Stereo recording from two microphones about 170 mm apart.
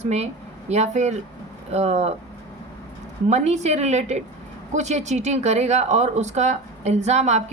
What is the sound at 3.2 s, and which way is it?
Speech, 40° right (ahead or behind).